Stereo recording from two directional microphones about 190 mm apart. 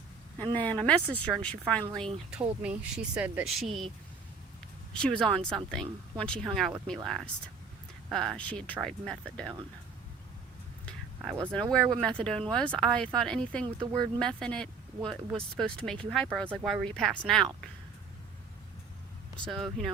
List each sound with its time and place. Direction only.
0.5 s a woman's voice: 10° left (ahead or behind)
4.9 s speech: 5° left (ahead or behind)
11.2 s speech: centre (ahead or behind)
13.7 s speech: 25° right (ahead or behind)
14.2 s speech: 5° left (ahead or behind)
19.5 s speech: centre (ahead or behind)